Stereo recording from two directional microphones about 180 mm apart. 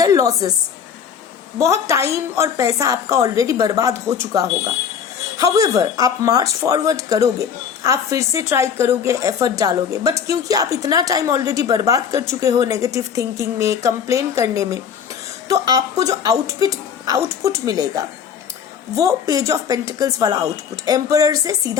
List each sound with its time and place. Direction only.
0.0 s a woman's voice: 20° right (ahead or behind)
1.5 s a woman's voice: 15° right (ahead or behind)